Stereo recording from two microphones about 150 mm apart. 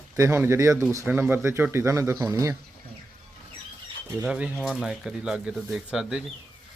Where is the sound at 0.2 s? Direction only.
15° right (ahead or behind).